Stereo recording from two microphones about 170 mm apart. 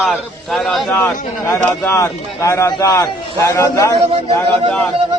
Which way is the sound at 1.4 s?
15° left (ahead or behind).